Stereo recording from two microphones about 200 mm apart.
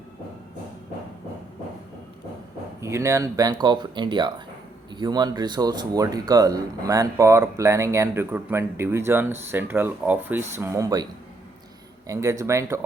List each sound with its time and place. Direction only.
2.8 s speech: 15° right (ahead or behind)
12.0 s speech: 15° right (ahead or behind)